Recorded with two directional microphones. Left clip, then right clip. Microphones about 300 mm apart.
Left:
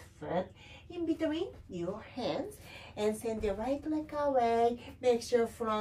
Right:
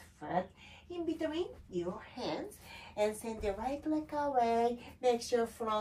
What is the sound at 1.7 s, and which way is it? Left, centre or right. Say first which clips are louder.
A woman's voice: even; centre.